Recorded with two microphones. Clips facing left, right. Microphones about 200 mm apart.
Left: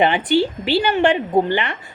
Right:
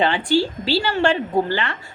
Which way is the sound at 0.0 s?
20° left (ahead or behind).